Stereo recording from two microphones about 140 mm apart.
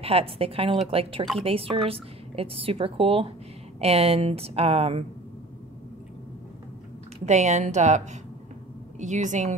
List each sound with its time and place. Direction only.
0.0 s a woman's voice: 45° right (ahead or behind)
7.2 s a woman's voice: 55° right (ahead or behind)